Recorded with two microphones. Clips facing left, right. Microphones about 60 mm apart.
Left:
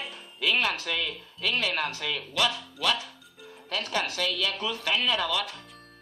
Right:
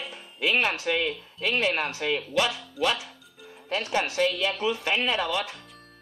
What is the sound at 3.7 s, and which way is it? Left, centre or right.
Speech, right.